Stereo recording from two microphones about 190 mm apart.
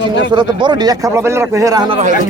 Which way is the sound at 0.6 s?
20° right (ahead or behind).